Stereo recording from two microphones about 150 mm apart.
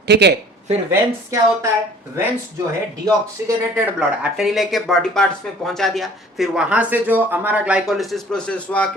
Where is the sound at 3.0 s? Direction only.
20° right (ahead or behind).